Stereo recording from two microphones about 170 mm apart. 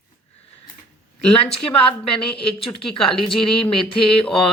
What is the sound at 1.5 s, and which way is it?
A woman's voice, 30° left (ahead or behind).